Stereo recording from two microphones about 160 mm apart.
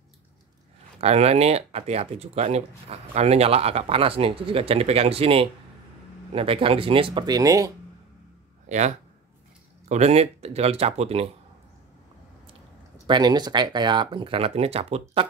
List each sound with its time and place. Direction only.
1.0 s speech: 40° right (ahead or behind); by 7.7 s 20° right (ahead or behind)
8.6 s speech: 45° right (ahead or behind)
12.4 s speech: 30° right (ahead or behind)